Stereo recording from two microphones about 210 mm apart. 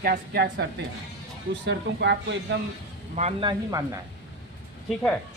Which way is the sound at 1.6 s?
55° right (ahead or behind).